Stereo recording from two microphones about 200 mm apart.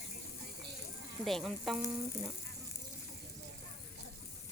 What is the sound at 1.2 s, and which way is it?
Speech, centre (ahead or behind).